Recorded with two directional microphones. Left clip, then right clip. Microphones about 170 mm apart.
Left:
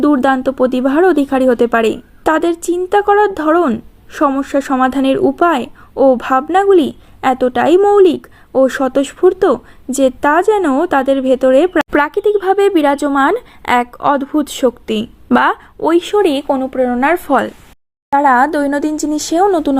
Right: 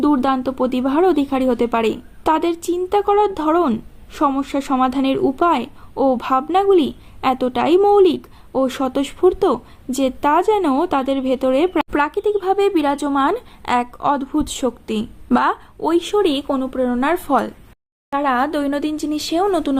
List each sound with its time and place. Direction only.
0.0 s a woman's voice: 25° left (ahead or behind)